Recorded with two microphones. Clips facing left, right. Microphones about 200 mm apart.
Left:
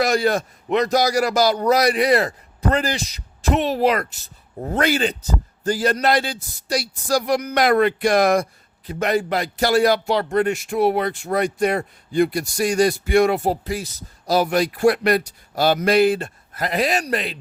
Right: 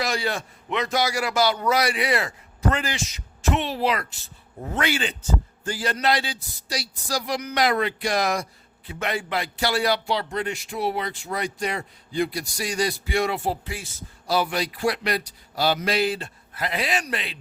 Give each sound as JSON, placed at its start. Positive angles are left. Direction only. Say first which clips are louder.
{"t": 0.0, "sound": "a man's voice", "louder": "left 8 dB", "side_deg": 45}
{"t": 8.9, "sound": "speech", "louder": "left 7 dB", "side_deg": 40}